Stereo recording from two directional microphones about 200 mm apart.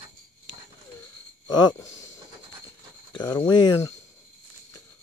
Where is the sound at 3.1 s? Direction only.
20° left (ahead or behind).